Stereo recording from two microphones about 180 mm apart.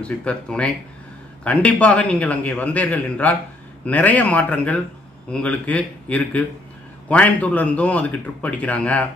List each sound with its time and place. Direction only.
0.0 s speech: 5° left (ahead or behind)